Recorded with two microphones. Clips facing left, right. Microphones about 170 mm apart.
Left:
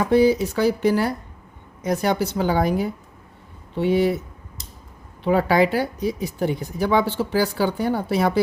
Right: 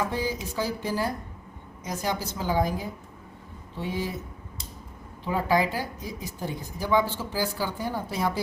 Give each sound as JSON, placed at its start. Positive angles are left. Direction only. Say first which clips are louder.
{"t": 0.1, "sound": "speech", "louder": "left 13 dB", "side_deg": 75}
{"t": 5.2, "sound": "speech", "louder": "left 7 dB", "side_deg": 75}